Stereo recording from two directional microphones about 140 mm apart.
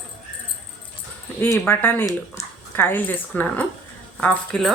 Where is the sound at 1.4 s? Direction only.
15° left (ahead or behind).